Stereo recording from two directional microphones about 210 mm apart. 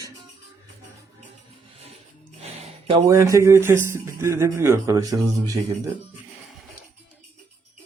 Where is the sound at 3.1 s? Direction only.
15° right (ahead or behind).